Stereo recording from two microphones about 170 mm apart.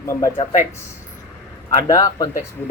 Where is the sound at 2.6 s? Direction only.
5° left (ahead or behind).